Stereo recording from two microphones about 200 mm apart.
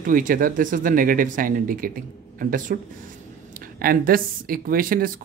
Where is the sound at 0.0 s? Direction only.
40° right (ahead or behind).